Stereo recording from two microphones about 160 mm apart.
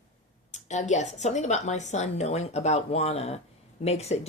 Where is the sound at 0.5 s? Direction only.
45° left (ahead or behind).